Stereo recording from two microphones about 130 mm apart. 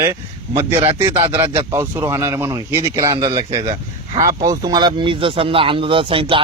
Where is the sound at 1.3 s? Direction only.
20° right (ahead or behind).